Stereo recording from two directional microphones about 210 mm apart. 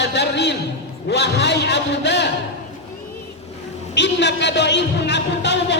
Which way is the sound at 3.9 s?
55° left (ahead or behind).